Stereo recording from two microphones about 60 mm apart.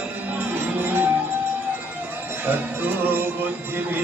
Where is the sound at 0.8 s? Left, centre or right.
Right.